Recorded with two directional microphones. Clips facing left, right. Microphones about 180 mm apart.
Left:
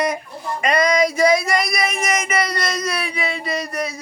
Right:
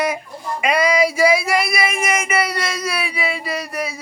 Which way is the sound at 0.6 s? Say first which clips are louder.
Even; 5° right (ahead or behind).